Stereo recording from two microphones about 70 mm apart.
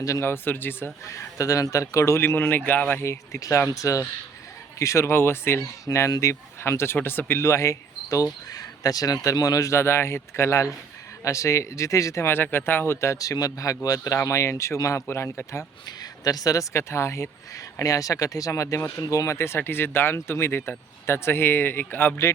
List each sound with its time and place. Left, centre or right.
0.0 s speech: left
0.3 s speech: left
1.0 s speech: left
3.0 s speech: left
6.1 s speech: left
8.2 s speech: left
12.3 s speech: left
15.0 s speech: left
15.9 s speech: left